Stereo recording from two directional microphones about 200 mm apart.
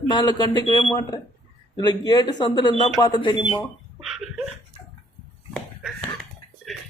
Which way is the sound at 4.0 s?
Centre (ahead or behind).